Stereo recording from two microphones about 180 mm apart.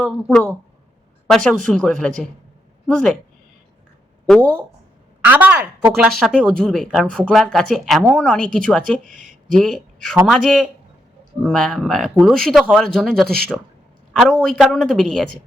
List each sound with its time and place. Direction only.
0.0 s speech: 5° left (ahead or behind)
4.4 s a woman's voice: 10° right (ahead or behind)
6.1 s speech: centre (ahead or behind)
9.0 s a sound: 45° right (ahead or behind)
9.6 s speech: centre (ahead or behind)